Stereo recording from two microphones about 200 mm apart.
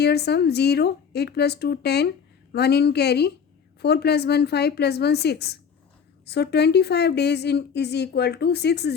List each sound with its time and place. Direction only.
0.0 s a woman's voice: 55° left (ahead or behind)